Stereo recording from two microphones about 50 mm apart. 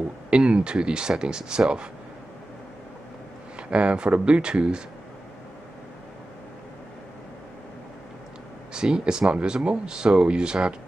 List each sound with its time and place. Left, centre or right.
0.3 s speech: centre
3.5 s speech: right
8.7 s speech: centre